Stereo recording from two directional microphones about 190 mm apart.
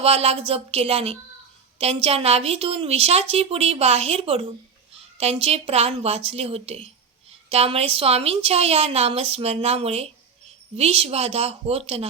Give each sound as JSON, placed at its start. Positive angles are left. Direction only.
{"t": 0.0, "sound": "a woman's voice", "side_deg": -30}